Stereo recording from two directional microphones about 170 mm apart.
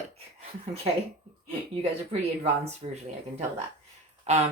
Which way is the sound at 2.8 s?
35° right (ahead or behind).